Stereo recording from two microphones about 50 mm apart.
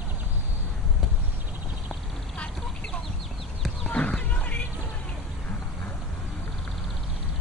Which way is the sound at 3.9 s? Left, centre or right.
Left.